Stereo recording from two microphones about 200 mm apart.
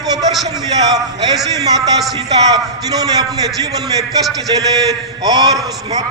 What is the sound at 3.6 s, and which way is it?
A man's voice, 20° right (ahead or behind).